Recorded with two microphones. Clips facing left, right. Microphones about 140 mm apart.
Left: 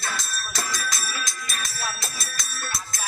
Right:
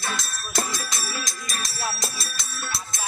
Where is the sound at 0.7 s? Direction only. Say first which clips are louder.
Even; 25° right (ahead or behind).